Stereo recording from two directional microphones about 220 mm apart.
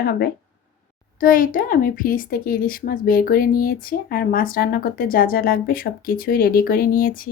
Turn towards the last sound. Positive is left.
turn(degrees=40)  # may be behind; listen again after turning